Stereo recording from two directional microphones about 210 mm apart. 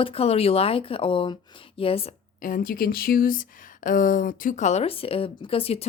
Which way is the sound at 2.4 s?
40° left (ahead or behind).